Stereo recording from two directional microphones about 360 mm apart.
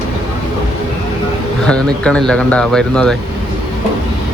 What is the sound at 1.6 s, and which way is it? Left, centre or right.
Speech, centre.